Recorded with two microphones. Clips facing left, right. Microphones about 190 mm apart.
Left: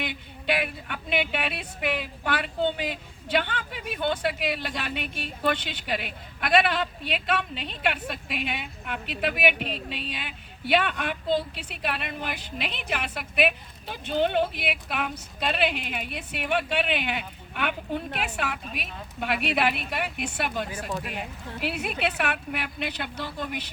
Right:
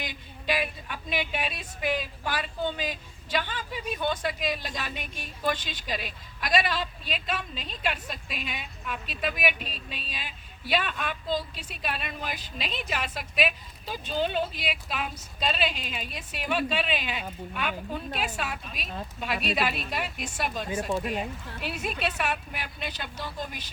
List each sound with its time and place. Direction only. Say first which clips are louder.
0.0 s speech: left 3 dB; 65° left (ahead or behind)